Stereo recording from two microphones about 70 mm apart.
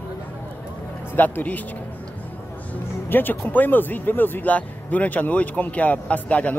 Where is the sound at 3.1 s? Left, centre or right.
Left.